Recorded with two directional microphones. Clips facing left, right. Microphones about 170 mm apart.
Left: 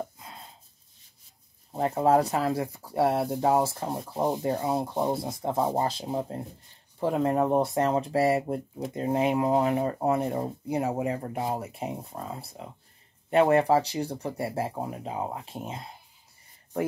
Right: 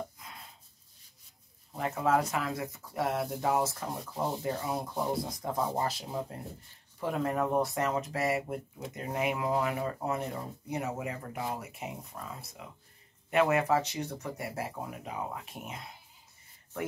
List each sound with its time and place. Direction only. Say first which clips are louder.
0.2 s chopping: left 4 dB; 30° left (ahead or behind)
1.7 s speech: left 6 dB; 30° left (ahead or behind)